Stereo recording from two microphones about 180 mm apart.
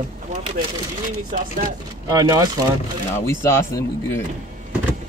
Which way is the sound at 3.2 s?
15° left (ahead or behind).